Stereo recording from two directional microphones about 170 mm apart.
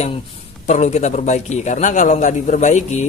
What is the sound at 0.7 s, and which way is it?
A man's voice, 40° left (ahead or behind).